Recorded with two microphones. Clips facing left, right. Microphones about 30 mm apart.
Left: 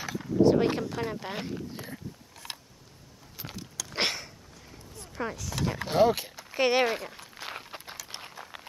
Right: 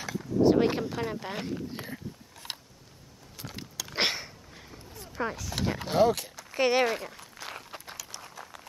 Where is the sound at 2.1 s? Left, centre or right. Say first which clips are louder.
Right 1 dB; centre.